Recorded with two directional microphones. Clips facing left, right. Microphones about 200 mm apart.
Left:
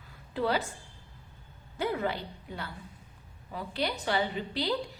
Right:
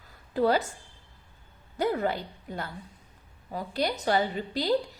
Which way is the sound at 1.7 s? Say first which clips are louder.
Right 4 dB; 40° right (ahead or behind).